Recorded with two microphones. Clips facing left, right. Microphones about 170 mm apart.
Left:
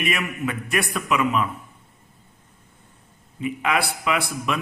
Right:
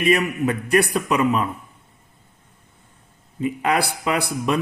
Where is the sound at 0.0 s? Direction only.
35° right (ahead or behind).